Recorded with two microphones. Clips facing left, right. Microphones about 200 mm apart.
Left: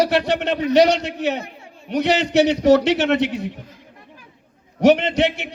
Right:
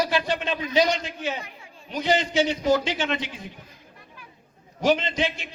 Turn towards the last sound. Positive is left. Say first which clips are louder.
# left 8 dB
turn(degrees=70)  # may be behind; listen again after turning